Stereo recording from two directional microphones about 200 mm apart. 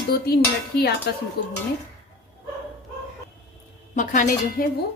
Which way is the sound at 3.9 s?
40° left (ahead or behind).